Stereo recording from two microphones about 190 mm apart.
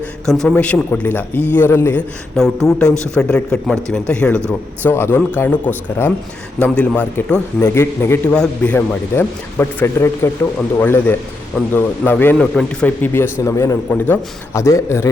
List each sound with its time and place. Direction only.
0.3 s a man's voice: 5° left (ahead or behind)
4.4 s speech: 15° right (ahead or behind)
4.9 s speech: 10° left (ahead or behind)